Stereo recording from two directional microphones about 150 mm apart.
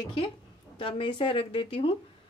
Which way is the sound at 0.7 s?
35° left (ahead or behind).